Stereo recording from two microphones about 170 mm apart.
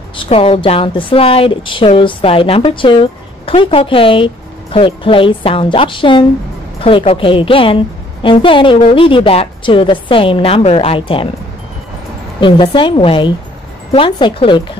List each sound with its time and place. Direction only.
0.3 s speech: 35° left (ahead or behind)
12.4 s a woman's voice: 30° left (ahead or behind)